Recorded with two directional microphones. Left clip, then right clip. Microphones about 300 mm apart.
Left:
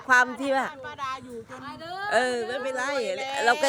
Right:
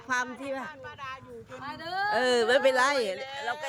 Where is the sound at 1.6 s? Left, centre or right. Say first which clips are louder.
Right 4 dB; centre.